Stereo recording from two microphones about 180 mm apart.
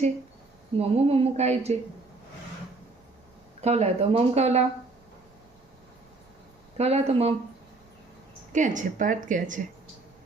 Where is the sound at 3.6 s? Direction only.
35° right (ahead or behind).